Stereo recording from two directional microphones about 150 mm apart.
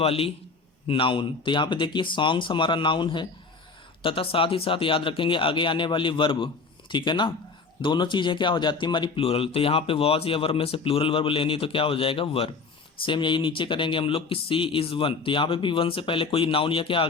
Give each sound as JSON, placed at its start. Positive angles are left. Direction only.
{"t": 0.0, "sound": "speech", "side_deg": 40}